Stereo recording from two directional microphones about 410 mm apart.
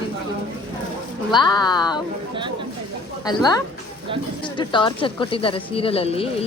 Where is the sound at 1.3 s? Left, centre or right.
Centre.